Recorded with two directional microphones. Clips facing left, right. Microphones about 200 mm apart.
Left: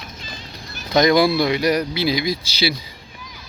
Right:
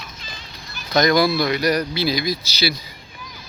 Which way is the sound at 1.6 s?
20° left (ahead or behind).